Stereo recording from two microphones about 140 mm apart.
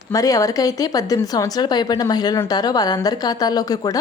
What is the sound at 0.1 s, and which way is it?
A woman's voice, 25° left (ahead or behind).